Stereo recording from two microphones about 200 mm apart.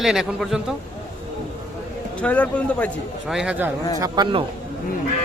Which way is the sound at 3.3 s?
5° right (ahead or behind).